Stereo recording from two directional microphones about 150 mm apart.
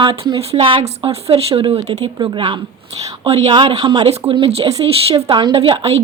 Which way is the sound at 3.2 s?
45° right (ahead or behind).